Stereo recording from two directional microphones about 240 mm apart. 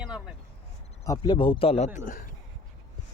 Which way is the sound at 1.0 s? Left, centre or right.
Centre.